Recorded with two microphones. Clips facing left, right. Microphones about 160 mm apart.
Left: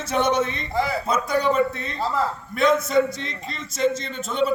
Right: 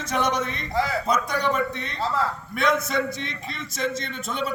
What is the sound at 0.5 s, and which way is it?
Speech, 5° left (ahead or behind).